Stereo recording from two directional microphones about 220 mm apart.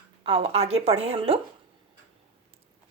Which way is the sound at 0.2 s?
25° right (ahead or behind).